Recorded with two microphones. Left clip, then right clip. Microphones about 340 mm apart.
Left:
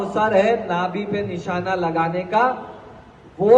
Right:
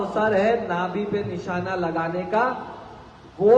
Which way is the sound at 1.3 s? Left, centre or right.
Left.